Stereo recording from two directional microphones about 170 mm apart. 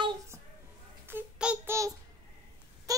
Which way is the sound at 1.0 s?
10° right (ahead or behind).